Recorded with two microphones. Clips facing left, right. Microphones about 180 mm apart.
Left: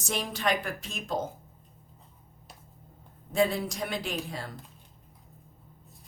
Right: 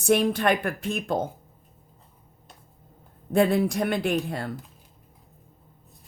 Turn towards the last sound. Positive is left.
turn(degrees=-60)  # may be behind; listen again after turning